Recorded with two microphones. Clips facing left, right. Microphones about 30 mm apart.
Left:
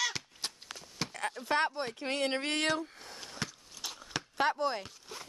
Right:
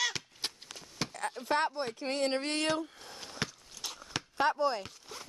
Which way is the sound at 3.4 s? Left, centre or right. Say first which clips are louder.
Even; centre.